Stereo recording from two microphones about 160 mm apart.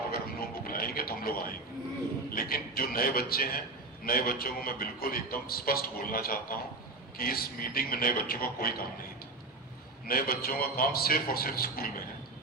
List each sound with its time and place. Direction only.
0.1 s a sound: 65° left (ahead or behind)
2.3 s a man's voice: 65° left (ahead or behind)
10.1 s a man's voice: 70° left (ahead or behind)